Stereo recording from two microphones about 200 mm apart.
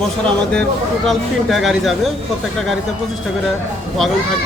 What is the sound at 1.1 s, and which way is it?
Speech, centre (ahead or behind).